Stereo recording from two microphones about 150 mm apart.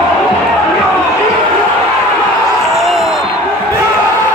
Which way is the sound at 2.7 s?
Centre (ahead or behind).